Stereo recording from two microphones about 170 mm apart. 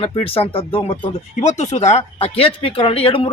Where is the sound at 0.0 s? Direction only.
35° left (ahead or behind).